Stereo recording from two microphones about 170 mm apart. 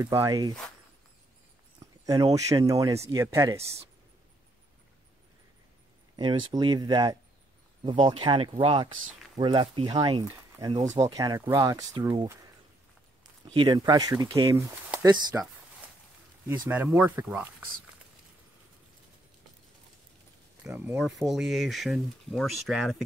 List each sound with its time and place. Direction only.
0.2 s speech: 20° right (ahead or behind)
2.0 s speech: 20° right (ahead or behind)
6.1 s speech: 25° right (ahead or behind)
10.7 s speech: 45° right (ahead or behind)
11.0 s speech: 20° right (ahead or behind)
13.5 s speech: 25° right (ahead or behind)
16.4 s speech: 15° right (ahead or behind)
21.0 s speech: centre (ahead or behind)